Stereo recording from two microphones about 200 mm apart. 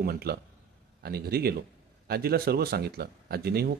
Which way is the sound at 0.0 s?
50° right (ahead or behind).